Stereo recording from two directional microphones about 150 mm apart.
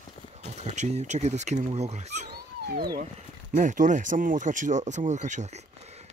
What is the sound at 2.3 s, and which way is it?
Speech, 90° right.